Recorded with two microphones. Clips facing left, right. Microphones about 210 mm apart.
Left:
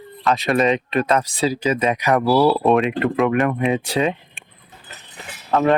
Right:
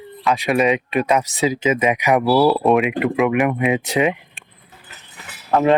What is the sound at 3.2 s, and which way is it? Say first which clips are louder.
Speech: right 1 dB; 10° right (ahead or behind).